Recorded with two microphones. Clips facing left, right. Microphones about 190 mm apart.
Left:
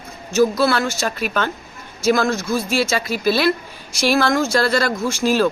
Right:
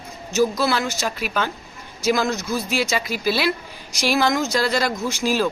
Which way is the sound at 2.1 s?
20° right (ahead or behind).